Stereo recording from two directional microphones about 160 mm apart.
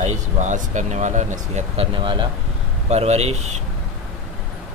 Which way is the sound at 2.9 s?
40° right (ahead or behind).